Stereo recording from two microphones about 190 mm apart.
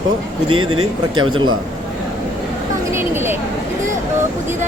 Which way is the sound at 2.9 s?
10° right (ahead or behind).